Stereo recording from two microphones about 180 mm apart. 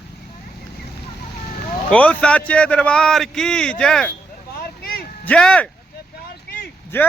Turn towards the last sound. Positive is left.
turn(degrees=10)  # may be behind; listen again after turning